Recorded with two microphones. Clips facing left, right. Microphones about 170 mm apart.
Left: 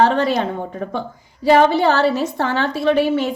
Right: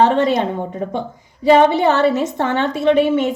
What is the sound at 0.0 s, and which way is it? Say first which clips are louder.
A woman's voice: right 2 dB; 20° right (ahead or behind).